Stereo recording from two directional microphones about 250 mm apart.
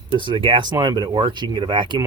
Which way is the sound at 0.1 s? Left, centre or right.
Centre.